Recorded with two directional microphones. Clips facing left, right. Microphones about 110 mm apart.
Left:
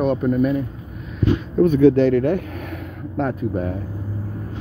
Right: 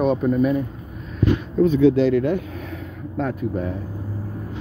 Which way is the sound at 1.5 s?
55° left (ahead or behind).